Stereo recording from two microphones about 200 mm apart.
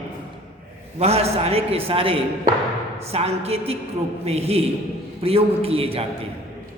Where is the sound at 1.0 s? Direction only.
30° right (ahead or behind).